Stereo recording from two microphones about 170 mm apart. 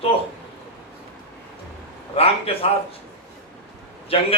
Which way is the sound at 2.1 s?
35° left (ahead or behind).